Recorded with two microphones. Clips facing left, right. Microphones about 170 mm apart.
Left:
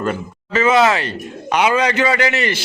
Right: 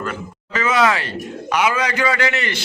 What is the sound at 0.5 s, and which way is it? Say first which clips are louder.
A man's voice: left 4 dB; 25° left (ahead or behind).